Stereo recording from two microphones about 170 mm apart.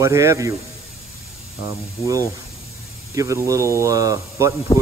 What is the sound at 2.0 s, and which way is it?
Speech, 35° left (ahead or behind).